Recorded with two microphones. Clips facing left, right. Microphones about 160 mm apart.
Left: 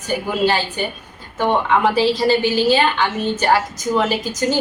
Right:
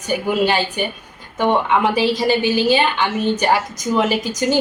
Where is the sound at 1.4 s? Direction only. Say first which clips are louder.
Even; 15° right (ahead or behind).